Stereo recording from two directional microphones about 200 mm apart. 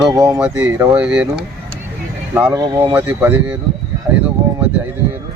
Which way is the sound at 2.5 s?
20° right (ahead or behind).